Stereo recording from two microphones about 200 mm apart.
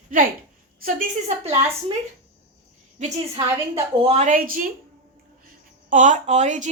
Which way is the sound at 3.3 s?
25° right (ahead or behind).